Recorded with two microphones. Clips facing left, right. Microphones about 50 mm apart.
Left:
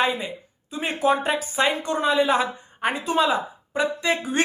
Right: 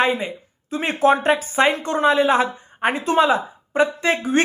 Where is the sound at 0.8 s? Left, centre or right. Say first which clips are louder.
Right 4 dB; right.